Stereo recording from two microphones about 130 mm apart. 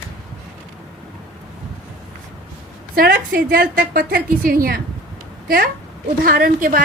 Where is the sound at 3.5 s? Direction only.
90° right.